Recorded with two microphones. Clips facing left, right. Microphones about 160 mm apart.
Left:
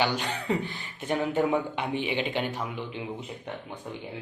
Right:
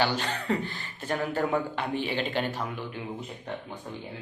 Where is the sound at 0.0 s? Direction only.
15° left (ahead or behind).